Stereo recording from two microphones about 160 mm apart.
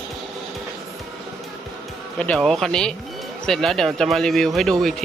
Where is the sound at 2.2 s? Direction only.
5° left (ahead or behind).